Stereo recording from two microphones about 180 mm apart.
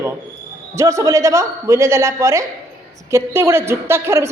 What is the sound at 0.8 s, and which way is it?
A woman's voice, 15° right (ahead or behind).